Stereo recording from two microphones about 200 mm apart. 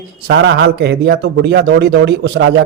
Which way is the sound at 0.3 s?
65° right (ahead or behind).